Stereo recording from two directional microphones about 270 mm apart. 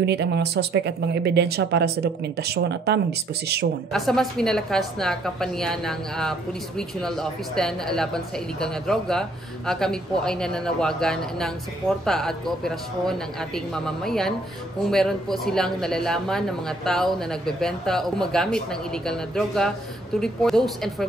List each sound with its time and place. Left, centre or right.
0.0 s speech: right
3.9 s speech: centre